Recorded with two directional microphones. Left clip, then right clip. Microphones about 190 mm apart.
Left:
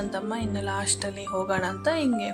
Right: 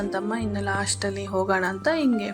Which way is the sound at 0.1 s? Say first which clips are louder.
Right 3 dB; 10° right (ahead or behind).